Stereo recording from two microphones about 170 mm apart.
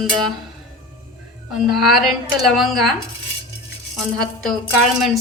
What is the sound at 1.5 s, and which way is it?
A woman's voice, centre (ahead or behind).